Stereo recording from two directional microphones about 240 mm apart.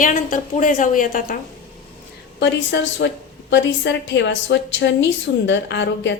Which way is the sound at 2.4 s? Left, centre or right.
Left.